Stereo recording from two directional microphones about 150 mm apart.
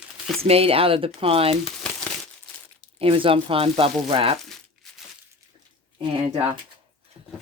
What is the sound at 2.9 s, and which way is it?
Speech, 35° right (ahead or behind).